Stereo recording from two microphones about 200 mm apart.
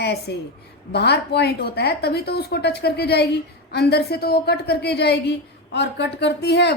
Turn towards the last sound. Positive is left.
turn(degrees=55)  # may be behind; listen again after turning